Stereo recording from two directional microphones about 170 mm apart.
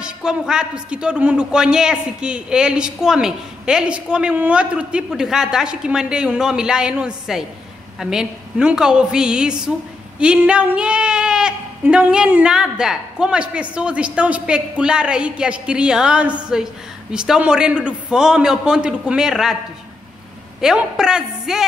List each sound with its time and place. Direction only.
0.0 s a man's voice: 5° right (ahead or behind)
20.6 s a man's voice: 5° right (ahead or behind)